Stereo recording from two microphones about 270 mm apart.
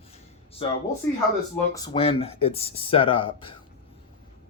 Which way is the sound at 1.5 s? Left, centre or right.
Centre.